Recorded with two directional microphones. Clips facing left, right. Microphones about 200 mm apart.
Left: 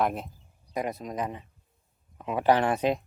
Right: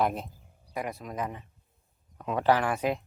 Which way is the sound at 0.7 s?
20° left (ahead or behind).